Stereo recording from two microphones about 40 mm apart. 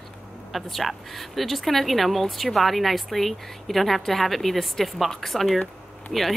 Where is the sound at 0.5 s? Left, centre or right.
Centre.